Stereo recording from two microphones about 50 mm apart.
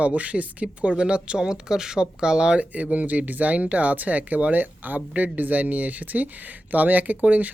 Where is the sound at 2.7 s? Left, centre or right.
Right.